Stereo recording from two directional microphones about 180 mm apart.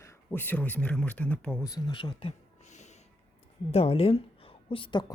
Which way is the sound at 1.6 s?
20° left (ahead or behind).